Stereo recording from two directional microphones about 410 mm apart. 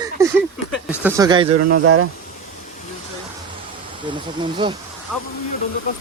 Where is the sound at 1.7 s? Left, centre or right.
Right.